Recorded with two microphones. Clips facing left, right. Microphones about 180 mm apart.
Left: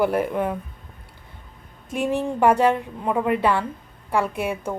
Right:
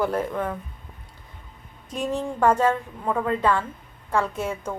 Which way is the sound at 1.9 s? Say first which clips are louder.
Left 3 dB; 15° left (ahead or behind).